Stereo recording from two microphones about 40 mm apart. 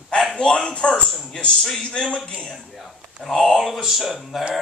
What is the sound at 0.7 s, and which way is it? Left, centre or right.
Speech, left.